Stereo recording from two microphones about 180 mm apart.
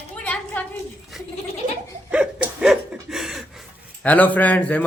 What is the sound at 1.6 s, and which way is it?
Laughter, 45° right (ahead or behind).